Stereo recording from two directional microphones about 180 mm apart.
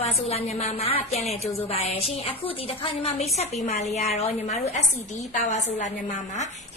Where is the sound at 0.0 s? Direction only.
35° left (ahead or behind).